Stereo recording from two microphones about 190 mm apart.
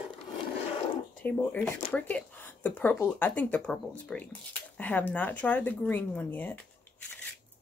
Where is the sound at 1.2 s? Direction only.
10° left (ahead or behind).